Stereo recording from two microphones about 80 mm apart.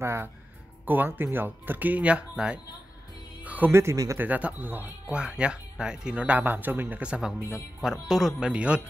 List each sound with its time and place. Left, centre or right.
0.0 s speech: right; by 2.6 s centre
3.4 s music: right
3.9 s speech: right
4.2 s speech: centre
5.1 s speech: centre